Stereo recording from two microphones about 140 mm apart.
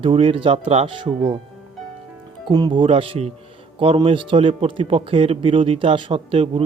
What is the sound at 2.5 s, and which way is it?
A man's voice, 35° right (ahead or behind).